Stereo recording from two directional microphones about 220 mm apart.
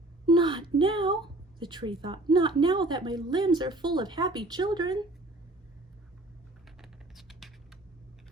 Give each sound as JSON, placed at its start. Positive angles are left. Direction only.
{"t": 0.3, "sound": "a woman's voice", "side_deg": -20}
{"t": 6.7, "sound": "typing", "side_deg": 0}